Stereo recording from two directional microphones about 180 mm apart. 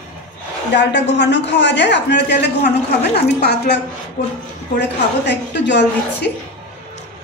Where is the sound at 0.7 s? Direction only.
75° left (ahead or behind).